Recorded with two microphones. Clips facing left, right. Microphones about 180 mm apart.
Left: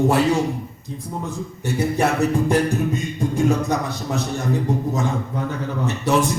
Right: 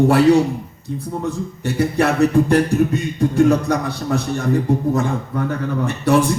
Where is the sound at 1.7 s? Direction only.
65° right (ahead or behind).